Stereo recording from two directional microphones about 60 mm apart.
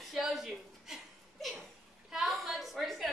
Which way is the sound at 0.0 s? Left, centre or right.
Centre.